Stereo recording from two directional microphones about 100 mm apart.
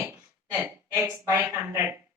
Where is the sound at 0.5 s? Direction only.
30° right (ahead or behind).